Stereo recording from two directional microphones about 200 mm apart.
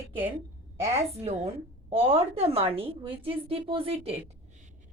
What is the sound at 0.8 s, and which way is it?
Speech, 15° right (ahead or behind).